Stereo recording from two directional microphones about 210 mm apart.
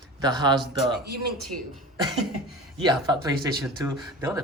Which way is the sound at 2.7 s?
20° right (ahead or behind).